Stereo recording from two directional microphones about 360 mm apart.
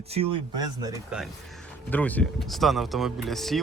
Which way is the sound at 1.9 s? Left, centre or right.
Centre.